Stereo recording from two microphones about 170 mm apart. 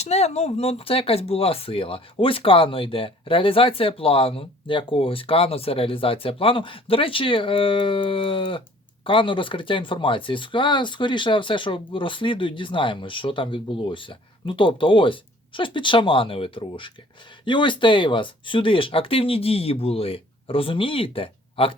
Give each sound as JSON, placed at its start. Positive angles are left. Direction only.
{"t": 0.0, "sound": "speech", "side_deg": 40}